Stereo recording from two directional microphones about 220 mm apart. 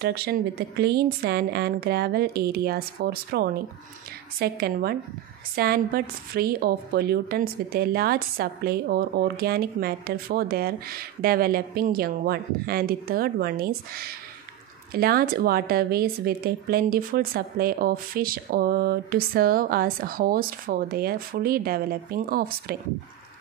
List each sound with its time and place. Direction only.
0.0 s a woman's voice: 45° right (ahead or behind)